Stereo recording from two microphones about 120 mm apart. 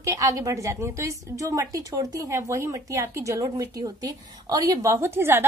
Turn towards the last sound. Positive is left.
turn(degrees=-20)  # may be behind; listen again after turning